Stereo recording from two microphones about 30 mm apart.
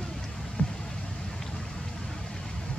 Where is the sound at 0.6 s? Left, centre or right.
Left.